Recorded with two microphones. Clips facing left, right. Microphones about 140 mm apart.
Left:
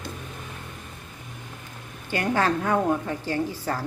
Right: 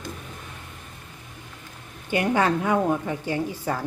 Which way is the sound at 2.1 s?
15° right (ahead or behind).